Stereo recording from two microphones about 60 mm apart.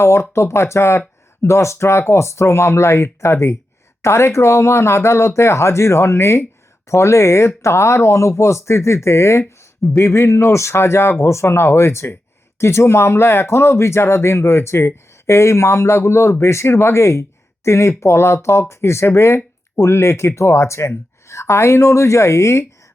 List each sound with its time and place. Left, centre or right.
0.0 s speech: left